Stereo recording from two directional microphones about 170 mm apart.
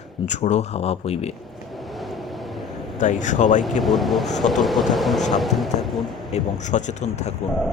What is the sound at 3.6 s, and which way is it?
Speech, centre (ahead or behind).